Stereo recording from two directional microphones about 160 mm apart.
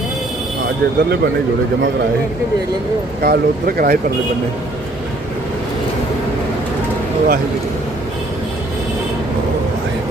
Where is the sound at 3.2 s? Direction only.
70° right (ahead or behind).